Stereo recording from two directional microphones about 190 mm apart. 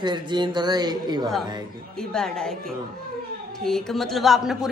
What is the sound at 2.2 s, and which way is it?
Speech, 5° left (ahead or behind).